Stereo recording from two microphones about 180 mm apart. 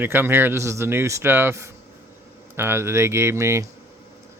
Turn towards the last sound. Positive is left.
turn(degrees=-15)  # may be behind; listen again after turning